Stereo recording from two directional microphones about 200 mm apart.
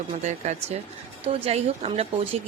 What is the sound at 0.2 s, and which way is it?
A woman's voice, 35° right (ahead or behind).